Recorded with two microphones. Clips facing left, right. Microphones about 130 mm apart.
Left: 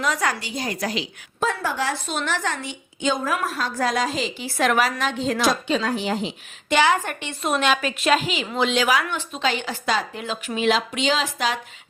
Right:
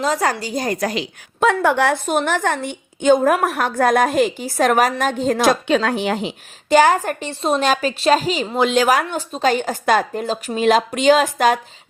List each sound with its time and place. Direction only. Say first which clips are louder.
0.0 s a woman's voice: right 5 dB; 35° right (ahead or behind); by 6.3 s 65° right (ahead or behind)
6.7 s a woman's voice: right 6 dB; 40° right (ahead or behind)